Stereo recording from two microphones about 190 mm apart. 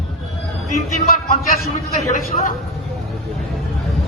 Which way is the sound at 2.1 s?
45° left (ahead or behind).